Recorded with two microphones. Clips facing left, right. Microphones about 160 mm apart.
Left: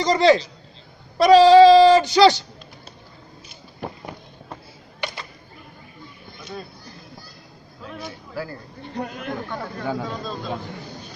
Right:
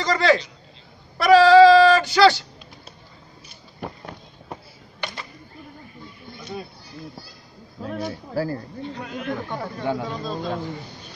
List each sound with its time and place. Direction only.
0.0 s speech: 20° left (ahead or behind)
7.8 s a man's voice: 40° right (ahead or behind)
9.8 s speech: centre (ahead or behind)